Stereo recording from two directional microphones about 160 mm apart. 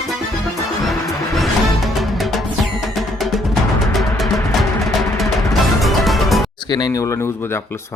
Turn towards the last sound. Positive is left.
turn(degrees=25)  # may be behind; listen again after turning